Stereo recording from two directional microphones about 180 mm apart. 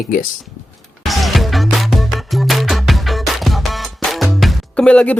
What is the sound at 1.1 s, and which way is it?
Music, centre (ahead or behind).